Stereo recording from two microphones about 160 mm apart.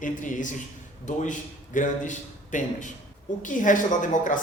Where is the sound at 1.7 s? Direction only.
50° left (ahead or behind).